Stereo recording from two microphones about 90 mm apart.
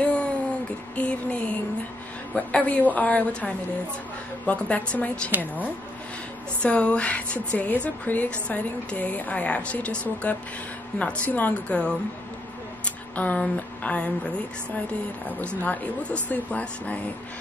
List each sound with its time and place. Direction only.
0.0 s a sound: 15° left (ahead or behind)
0.9 s speech: 15° left (ahead or behind)
6.6 s speech: 15° left (ahead or behind)